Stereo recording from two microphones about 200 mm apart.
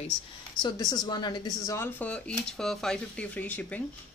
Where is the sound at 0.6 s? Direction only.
20° left (ahead or behind).